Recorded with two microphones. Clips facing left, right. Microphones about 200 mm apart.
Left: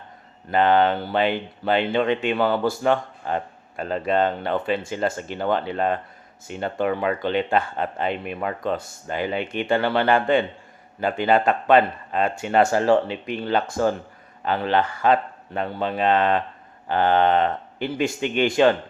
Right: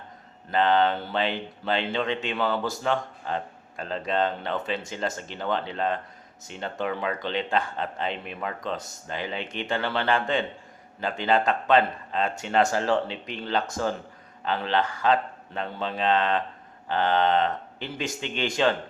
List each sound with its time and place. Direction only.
0.5 s speech: 55° left (ahead or behind)
12.8 s speech: 10° left (ahead or behind)
13.5 s speech: 60° left (ahead or behind)